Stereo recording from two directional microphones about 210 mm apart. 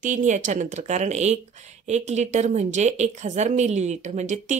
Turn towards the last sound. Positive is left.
turn(degrees=-35)  # may be behind; listen again after turning